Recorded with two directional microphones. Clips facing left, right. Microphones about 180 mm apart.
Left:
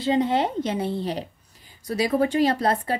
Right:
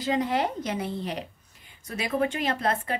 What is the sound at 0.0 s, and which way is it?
A woman's voice, 25° left (ahead or behind).